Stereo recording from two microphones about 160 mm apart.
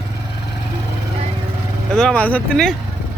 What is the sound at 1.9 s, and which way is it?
Speech, 5° left (ahead or behind).